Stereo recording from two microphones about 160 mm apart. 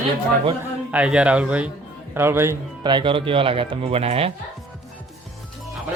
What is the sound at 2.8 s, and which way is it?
Speech, 30° right (ahead or behind).